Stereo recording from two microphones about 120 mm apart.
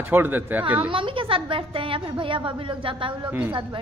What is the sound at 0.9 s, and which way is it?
A woman's voice, 45° right (ahead or behind).